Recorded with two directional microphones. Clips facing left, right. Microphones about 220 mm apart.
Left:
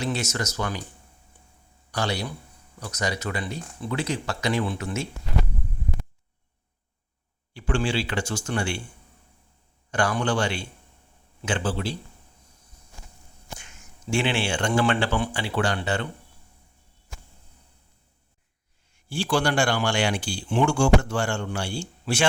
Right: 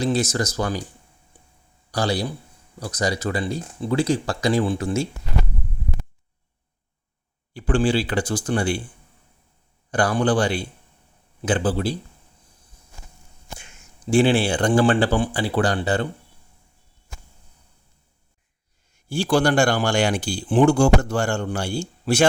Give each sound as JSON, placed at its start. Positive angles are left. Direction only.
{"t": 0.0, "sound": "speech", "side_deg": -35}
{"t": 1.9, "sound": "a man's voice", "side_deg": -35}
{"t": 7.5, "sound": "speech", "side_deg": -35}
{"t": 9.9, "sound": "speech", "side_deg": -35}
{"t": 14.1, "sound": "speech", "side_deg": -35}
{"t": 19.0, "sound": "speech", "side_deg": -40}